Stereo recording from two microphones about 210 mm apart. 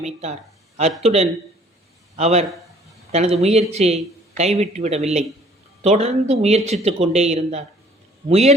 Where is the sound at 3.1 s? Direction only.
30° right (ahead or behind).